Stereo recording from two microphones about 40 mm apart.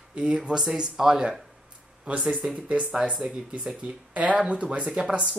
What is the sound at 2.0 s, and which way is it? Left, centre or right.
Speech, right.